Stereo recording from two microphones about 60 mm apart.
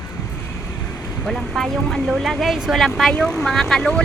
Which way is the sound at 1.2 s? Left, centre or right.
Centre.